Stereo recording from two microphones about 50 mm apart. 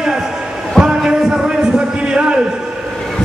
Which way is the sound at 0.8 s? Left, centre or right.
Centre.